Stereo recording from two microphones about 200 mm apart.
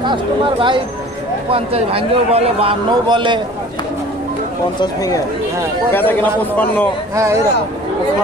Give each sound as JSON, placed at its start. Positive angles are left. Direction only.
{"t": 0.0, "sound": "a man's voice", "side_deg": -25}
{"t": 4.7, "sound": "a man's voice", "side_deg": 15}
{"t": 7.2, "sound": "speech", "side_deg": -15}